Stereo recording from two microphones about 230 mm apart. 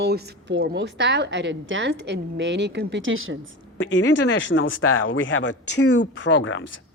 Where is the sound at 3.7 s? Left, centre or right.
Left.